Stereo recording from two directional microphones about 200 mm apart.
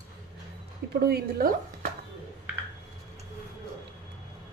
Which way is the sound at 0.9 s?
50° right (ahead or behind).